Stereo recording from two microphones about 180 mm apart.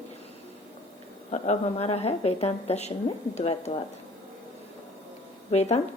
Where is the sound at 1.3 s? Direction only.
35° left (ahead or behind).